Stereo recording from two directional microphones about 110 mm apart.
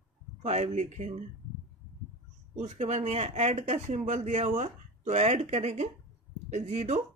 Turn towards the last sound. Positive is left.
turn(degrees=-90)